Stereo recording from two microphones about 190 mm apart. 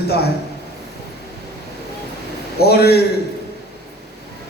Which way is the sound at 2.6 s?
55° left (ahead or behind).